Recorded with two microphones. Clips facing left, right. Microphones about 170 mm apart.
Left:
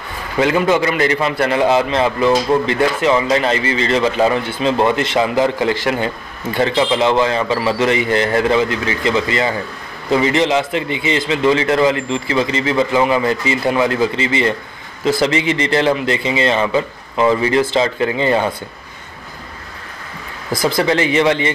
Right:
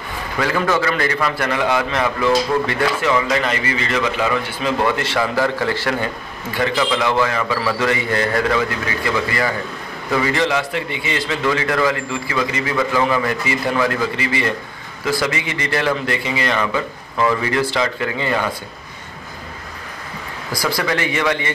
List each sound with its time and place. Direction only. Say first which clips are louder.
0.4 s a man's voice: left 5 dB; 20° left (ahead or behind)
20.6 s a man's voice: left 5 dB; 25° left (ahead or behind)